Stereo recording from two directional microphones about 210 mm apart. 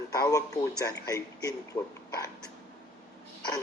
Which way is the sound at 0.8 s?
15° left (ahead or behind).